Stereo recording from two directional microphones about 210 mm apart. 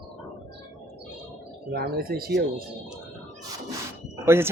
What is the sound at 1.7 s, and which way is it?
Speech, 45° right (ahead or behind).